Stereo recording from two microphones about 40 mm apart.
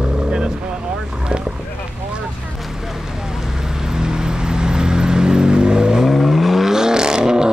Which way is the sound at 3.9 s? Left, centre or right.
Centre.